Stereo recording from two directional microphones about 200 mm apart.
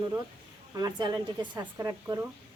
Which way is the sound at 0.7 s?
20° right (ahead or behind).